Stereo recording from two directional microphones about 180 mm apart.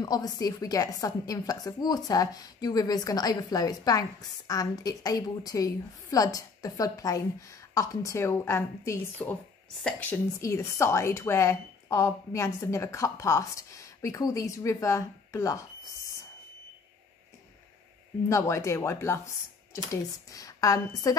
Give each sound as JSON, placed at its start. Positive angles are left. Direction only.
{"t": 0.0, "sound": "a woman's voice", "side_deg": 20}
{"t": 18.3, "sound": "a woman's voice", "side_deg": 15}